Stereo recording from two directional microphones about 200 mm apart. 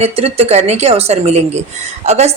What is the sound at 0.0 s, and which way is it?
A woman's voice, 30° right (ahead or behind).